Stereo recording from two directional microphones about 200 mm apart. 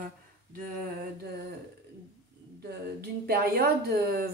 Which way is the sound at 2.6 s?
50° right (ahead or behind).